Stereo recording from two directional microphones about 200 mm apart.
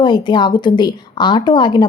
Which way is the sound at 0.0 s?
20° left (ahead or behind).